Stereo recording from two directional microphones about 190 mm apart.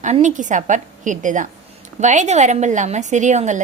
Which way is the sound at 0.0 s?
40° right (ahead or behind).